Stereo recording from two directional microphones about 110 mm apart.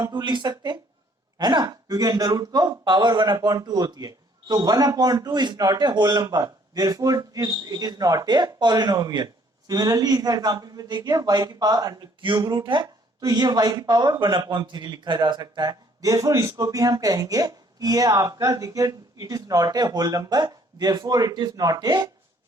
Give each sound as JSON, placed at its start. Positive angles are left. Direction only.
{"t": 0.0, "sound": "speech", "side_deg": -45}